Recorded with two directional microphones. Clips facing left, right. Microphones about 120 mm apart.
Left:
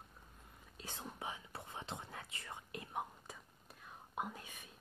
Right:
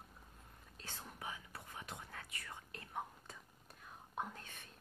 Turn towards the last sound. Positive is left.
turn(degrees=10)  # may be behind; listen again after turning